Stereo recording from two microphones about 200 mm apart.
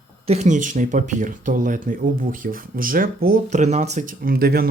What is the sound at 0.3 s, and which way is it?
Speech, 35° right (ahead or behind).